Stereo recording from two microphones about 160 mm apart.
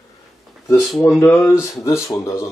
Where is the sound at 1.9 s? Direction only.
20° left (ahead or behind).